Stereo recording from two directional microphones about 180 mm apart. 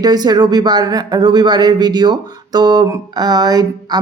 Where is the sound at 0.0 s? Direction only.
20° right (ahead or behind).